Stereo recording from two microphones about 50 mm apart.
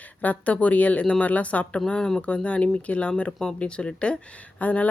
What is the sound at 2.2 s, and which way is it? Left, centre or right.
Speech, left.